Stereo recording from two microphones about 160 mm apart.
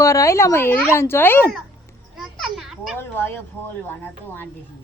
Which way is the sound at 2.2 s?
Centre (ahead or behind).